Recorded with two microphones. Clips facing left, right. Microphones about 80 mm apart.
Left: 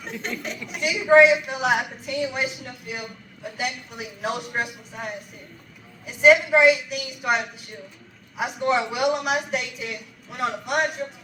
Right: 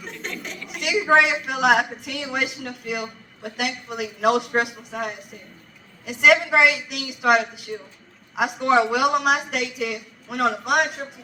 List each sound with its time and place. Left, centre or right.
0.0 s speech: centre
1.1 s speech: right
8.4 s speech: right